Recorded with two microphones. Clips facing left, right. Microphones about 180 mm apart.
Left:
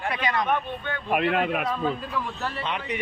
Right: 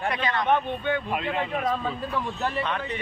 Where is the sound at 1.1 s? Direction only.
65° left (ahead or behind).